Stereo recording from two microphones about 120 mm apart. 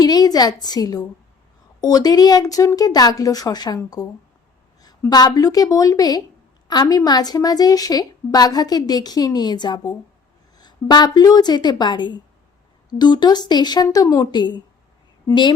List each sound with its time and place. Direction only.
0.0 s a woman's voice: 35° left (ahead or behind)